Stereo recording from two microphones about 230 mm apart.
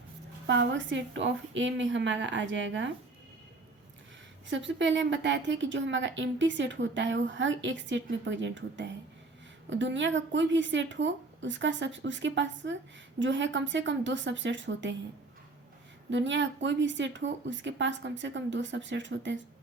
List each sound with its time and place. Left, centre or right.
0.4 s a woman's voice: right
4.4 s a woman's voice: right
16.0 s a woman's voice: right